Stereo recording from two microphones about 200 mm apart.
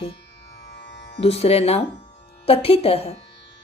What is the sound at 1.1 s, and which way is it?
Speech, 30° left (ahead or behind).